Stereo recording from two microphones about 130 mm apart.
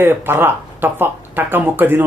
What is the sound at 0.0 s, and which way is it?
Speech, 15° right (ahead or behind).